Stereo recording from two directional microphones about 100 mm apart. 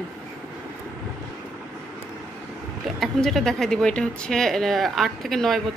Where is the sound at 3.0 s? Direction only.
Centre (ahead or behind).